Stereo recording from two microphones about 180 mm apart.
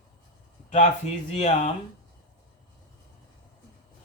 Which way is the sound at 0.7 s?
40° left (ahead or behind).